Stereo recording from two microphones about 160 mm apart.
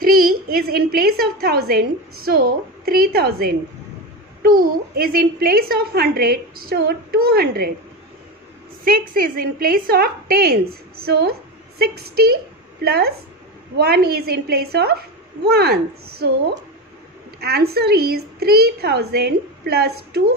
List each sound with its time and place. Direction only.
0.0 s a woman's voice: 70° right (ahead or behind)
8.8 s a woman's voice: 65° right (ahead or behind); by 20.2 s 85° right